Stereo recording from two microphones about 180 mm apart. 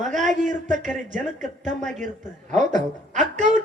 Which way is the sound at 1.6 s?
45° right (ahead or behind).